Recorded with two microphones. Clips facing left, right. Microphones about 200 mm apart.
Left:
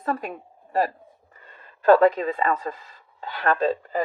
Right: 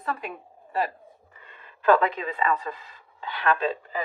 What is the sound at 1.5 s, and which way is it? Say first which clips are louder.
A woman's voice: left 4 dB; 40° left (ahead or behind).